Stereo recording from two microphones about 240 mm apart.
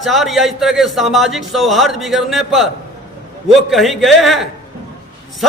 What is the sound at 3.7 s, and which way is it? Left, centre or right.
A man's voice, centre.